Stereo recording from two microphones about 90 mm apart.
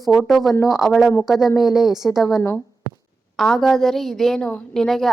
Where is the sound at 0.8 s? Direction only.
Centre (ahead or behind).